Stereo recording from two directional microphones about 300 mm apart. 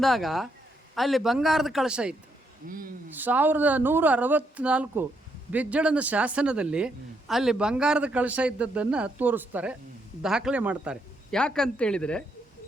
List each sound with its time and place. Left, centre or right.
0.0 s speech: centre
2.6 s speech: right
3.1 s speech: centre